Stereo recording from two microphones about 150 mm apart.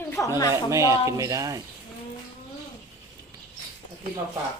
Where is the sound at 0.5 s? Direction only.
20° right (ahead or behind).